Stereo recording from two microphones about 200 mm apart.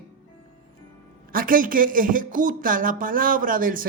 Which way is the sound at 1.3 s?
45° right (ahead or behind).